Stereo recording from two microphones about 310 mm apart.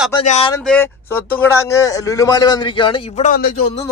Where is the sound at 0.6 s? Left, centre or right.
Centre; by 3.6 s left.